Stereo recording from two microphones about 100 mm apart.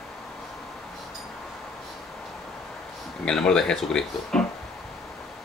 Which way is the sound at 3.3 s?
5° left (ahead or behind).